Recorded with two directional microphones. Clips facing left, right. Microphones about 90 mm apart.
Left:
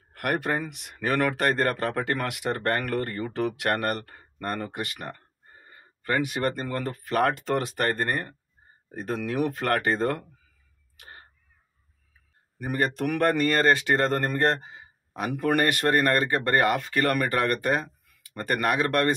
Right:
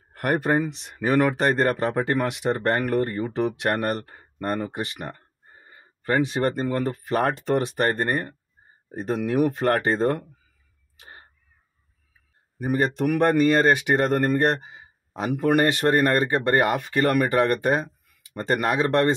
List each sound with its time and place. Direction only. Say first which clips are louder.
0.1 s speech: right 5 dB; 30° right (ahead or behind)
0.9 s speech: right 4 dB; 15° right (ahead or behind)
11.0 s crow: right 1 dB; 20° right (ahead or behind)
12.5 s speech: right 4 dB; 20° right (ahead or behind)